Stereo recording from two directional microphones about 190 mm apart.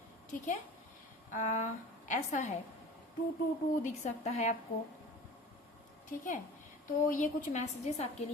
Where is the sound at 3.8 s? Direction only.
35° left (ahead or behind).